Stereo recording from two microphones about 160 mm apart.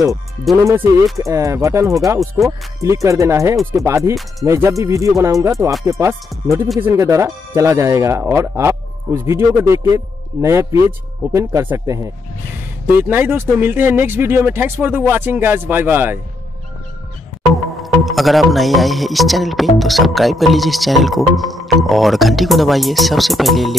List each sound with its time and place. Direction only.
1.1 s speech: 20° right (ahead or behind)
17.8 s speech: centre (ahead or behind)